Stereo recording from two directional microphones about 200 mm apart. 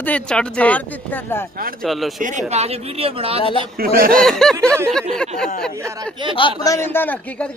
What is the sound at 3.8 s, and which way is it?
Speech, 45° right (ahead or behind).